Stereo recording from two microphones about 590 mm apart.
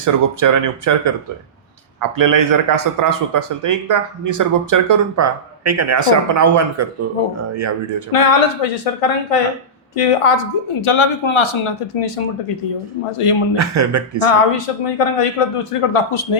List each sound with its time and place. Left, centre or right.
0.0 s speech: right
8.1 s speech: left
13.6 s speech: right
14.3 s speech: left